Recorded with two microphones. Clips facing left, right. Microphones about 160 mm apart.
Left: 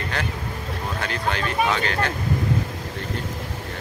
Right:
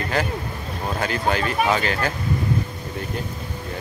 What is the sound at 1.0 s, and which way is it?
Speech, 5° right (ahead or behind).